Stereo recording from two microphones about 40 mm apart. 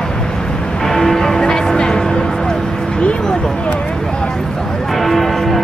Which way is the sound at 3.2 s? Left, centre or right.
Centre.